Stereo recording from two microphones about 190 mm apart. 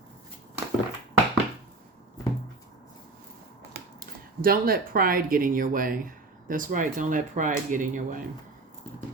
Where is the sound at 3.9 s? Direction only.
50° right (ahead or behind).